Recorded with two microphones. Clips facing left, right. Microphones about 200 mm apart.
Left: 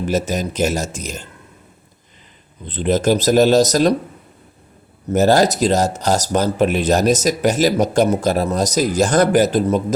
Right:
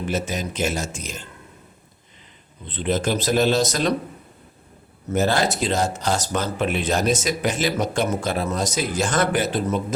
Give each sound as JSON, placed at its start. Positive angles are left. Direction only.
{"t": 0.1, "sound": "speech", "side_deg": 40}
{"t": 2.6, "sound": "speech", "side_deg": 40}
{"t": 5.1, "sound": "speech", "side_deg": 40}